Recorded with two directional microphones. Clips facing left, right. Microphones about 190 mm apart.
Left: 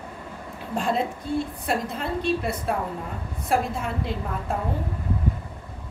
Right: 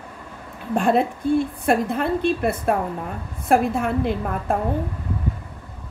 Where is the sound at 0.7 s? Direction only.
55° right (ahead or behind).